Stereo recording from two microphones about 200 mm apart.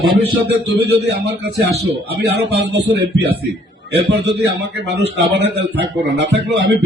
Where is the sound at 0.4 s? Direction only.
55° right (ahead or behind).